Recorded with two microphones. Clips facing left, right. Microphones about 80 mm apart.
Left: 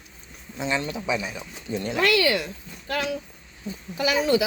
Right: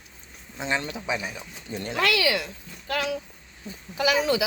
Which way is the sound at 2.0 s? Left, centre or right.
Right.